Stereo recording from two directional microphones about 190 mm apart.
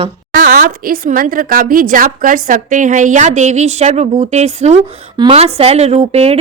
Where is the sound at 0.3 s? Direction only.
45° right (ahead or behind).